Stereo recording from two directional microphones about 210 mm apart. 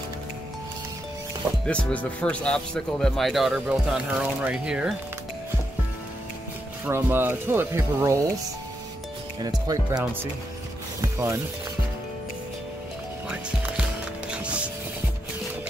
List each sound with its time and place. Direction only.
1.7 s speech: 5° left (ahead or behind)
6.9 s speech: 10° right (ahead or behind)
9.4 s speech: 20° right (ahead or behind)
11.0 s speech: 15° right (ahead or behind)
14.3 s music: 5° right (ahead or behind)